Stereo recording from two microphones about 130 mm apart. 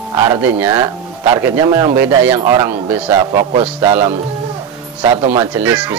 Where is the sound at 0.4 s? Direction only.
20° right (ahead or behind).